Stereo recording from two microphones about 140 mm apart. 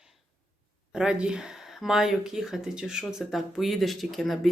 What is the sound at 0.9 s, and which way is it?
Speech, 5° right (ahead or behind).